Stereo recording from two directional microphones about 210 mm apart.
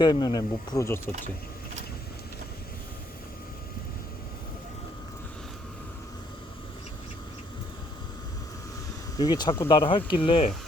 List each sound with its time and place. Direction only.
0.0 s speech: 20° left (ahead or behind)
9.1 s speech: 20° left (ahead or behind)